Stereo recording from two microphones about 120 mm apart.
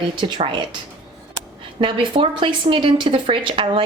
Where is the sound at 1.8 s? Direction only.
45° right (ahead or behind).